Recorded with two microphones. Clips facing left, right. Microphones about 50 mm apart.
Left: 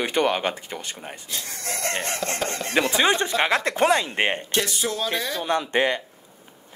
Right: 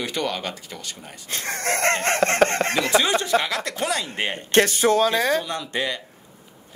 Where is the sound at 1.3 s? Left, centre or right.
Right.